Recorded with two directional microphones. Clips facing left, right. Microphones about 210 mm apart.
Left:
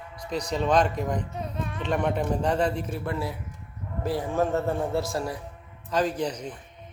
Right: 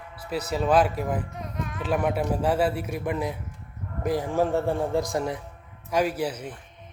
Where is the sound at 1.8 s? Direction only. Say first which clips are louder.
Right 1 dB; 5° right (ahead or behind).